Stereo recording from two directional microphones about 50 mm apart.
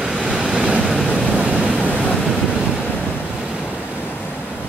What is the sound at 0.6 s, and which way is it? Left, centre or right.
Waves, right.